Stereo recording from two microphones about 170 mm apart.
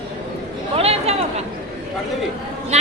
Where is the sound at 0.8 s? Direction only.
35° right (ahead or behind).